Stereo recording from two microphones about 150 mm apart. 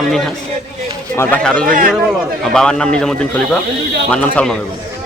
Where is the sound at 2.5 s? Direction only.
5° left (ahead or behind).